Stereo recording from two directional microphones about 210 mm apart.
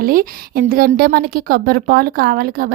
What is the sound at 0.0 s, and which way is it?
A woman's voice, 45° right (ahead or behind).